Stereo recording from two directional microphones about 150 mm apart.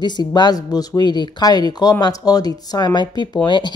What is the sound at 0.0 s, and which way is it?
Speech, 30° left (ahead or behind).